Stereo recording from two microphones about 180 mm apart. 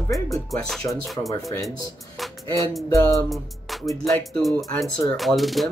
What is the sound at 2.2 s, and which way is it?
Music, centre (ahead or behind).